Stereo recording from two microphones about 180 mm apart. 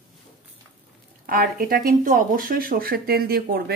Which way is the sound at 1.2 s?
55° right (ahead or behind).